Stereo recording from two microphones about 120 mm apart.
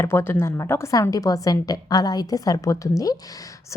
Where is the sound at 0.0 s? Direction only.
20° left (ahead or behind).